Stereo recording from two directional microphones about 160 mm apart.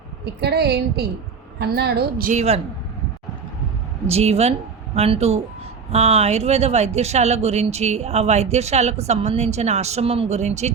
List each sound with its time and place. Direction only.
0.4 s a woman's voice: 90° right
2.3 s a woman's voice: 45° right (ahead or behind)
4.1 s a woman's voice: 40° right (ahead or behind)